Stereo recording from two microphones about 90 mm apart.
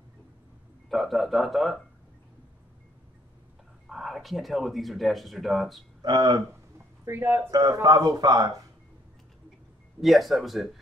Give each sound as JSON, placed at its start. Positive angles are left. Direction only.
{"t": 0.8, "sound": "speech", "side_deg": 0}
{"t": 3.8, "sound": "speech", "side_deg": 0}
{"t": 6.0, "sound": "speech", "side_deg": -50}
{"t": 7.1, "sound": "speech", "side_deg": -25}
{"t": 7.5, "sound": "speech", "side_deg": -40}
{"t": 9.9, "sound": "speech", "side_deg": 0}